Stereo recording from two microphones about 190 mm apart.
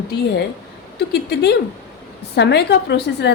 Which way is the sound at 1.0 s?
60° left (ahead or behind).